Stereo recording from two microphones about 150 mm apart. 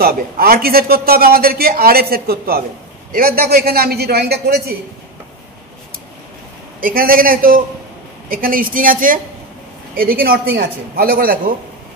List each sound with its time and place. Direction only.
0.0 s a man's voice: 90° right
3.1 s a man's voice: 80° right
6.8 s a woman's voice: 70° right (ahead or behind)